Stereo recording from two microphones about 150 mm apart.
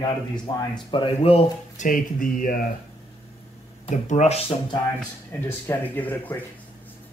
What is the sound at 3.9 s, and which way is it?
Speech, 55° left (ahead or behind).